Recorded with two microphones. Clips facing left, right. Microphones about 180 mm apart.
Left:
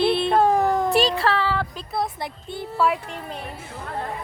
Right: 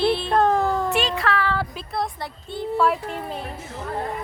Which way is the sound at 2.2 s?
15° left (ahead or behind).